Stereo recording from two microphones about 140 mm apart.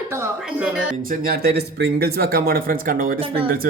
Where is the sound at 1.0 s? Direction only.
90° right.